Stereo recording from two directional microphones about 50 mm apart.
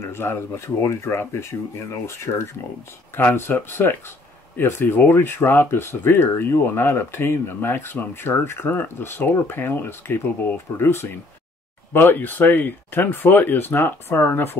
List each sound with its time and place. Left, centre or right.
0.0 s speech: left
3.3 s speech: left
13.7 s speech: left